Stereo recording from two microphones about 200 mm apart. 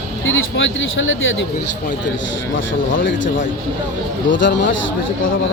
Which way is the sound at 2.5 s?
70° left (ahead or behind).